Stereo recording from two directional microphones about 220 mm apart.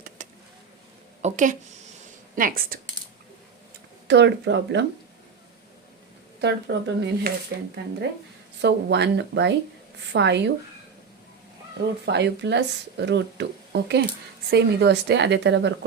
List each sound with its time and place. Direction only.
0.2 s a sound: 35° right (ahead or behind)
1.2 s a woman's voice: 35° right (ahead or behind)
4.1 s speech: 50° right (ahead or behind)
6.4 s speech: 50° right (ahead or behind)
8.6 s speech: 50° right (ahead or behind)
12.0 s speech: 50° right (ahead or behind)